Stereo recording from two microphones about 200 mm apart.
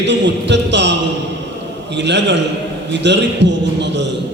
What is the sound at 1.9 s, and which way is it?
A man's voice, 60° right (ahead or behind).